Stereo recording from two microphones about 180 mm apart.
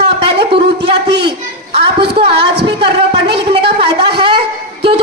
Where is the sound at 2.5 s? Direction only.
65° right (ahead or behind).